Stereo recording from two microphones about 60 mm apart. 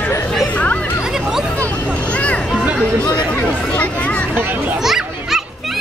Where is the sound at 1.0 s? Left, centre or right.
Centre.